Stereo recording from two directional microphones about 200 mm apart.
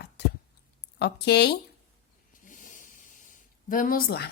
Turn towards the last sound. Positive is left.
turn(degrees=50)  # may be behind; listen again after turning